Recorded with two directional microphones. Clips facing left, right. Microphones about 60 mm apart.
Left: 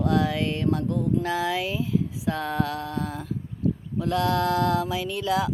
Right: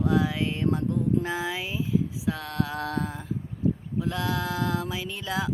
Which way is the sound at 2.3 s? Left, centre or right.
Centre.